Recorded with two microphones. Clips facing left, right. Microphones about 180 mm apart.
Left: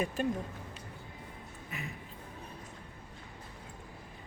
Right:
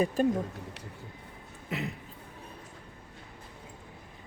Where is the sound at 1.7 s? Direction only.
75° right (ahead or behind).